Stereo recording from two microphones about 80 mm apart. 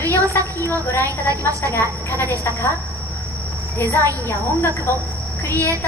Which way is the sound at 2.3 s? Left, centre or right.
Left.